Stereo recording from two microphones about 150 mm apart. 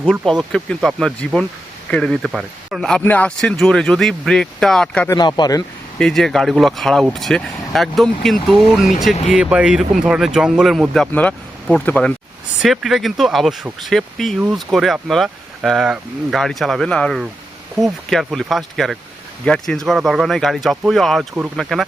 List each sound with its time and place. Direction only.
0.0 s speech: centre (ahead or behind)
5.0 s speech: 25° left (ahead or behind)
6.0 s speech: 5° left (ahead or behind)
12.6 s speech: centre (ahead or behind)